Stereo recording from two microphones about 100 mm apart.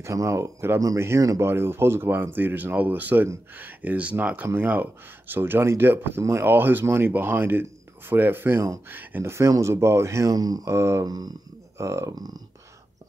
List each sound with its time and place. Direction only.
0.0 s speech: 30° right (ahead or behind)
11.1 s speech: 40° right (ahead or behind)